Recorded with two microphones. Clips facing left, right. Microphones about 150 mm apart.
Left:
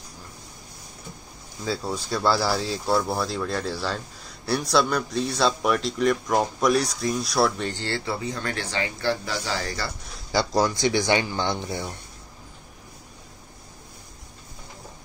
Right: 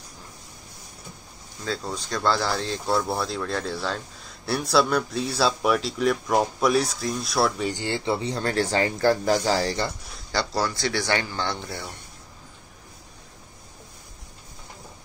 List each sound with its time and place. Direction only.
1.6 s speech: 10° left (ahead or behind)
7.7 s speech: 15° right (ahead or behind); by 9.8 s 35° right (ahead or behind)
10.3 s speech: 15° left (ahead or behind)